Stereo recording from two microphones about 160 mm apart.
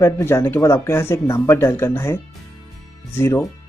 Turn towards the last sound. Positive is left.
turn(degrees=15)  # may be behind; listen again after turning